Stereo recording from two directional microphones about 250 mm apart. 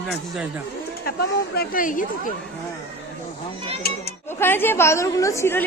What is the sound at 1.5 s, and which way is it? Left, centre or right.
Speech, left.